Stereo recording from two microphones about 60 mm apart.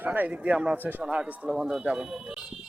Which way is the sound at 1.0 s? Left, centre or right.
Centre.